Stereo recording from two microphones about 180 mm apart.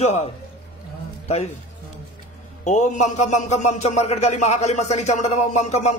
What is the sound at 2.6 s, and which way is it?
A man's voice, 40° left (ahead or behind).